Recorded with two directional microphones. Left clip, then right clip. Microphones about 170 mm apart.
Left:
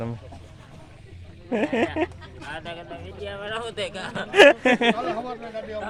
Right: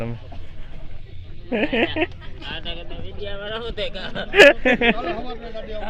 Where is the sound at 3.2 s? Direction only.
45° left (ahead or behind); by 4.2 s 65° left (ahead or behind).